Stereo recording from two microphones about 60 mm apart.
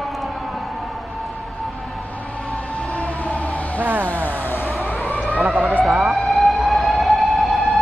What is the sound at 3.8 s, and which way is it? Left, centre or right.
Vehicle, right.